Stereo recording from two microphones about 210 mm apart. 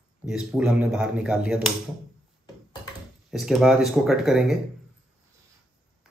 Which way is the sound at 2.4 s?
20° left (ahead or behind).